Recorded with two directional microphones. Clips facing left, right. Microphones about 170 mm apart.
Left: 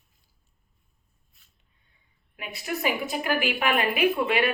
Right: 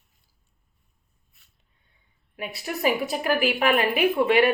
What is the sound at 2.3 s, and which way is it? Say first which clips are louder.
A woman's voice: right 1 dB; 35° right (ahead or behind).